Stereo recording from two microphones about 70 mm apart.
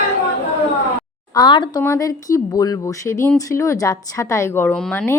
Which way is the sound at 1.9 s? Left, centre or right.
Left.